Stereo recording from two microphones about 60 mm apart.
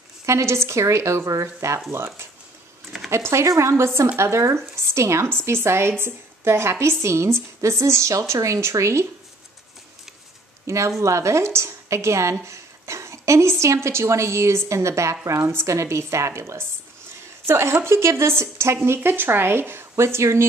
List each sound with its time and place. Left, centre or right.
0.3 s a woman's voice: right
5.3 s a woman's voice: right
11.0 s a woman's voice: right
18.9 s speech: right